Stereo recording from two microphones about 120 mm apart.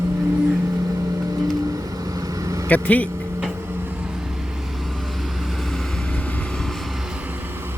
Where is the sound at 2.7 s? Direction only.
15° left (ahead or behind).